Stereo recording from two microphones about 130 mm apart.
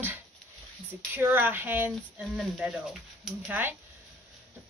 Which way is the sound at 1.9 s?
Centre (ahead or behind).